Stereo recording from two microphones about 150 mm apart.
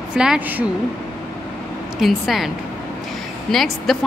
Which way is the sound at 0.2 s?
5° right (ahead or behind).